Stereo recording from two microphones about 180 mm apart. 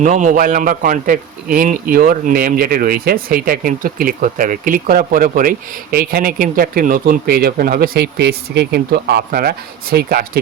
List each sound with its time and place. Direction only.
0.0 s a man's voice: 45° right (ahead or behind)